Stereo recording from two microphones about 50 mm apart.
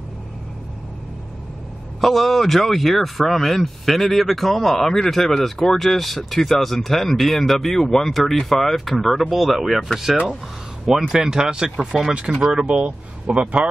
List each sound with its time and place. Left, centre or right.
2.0 s speech: centre
10.9 s speech: centre
12.6 s speech: right